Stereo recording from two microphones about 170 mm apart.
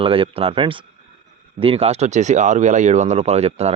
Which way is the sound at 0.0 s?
30° right (ahead or behind).